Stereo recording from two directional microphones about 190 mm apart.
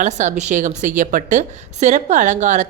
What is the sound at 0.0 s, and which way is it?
Speech, 40° right (ahead or behind).